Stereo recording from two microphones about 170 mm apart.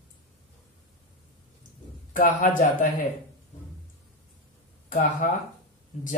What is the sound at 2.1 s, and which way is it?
Speech, 50° left (ahead or behind).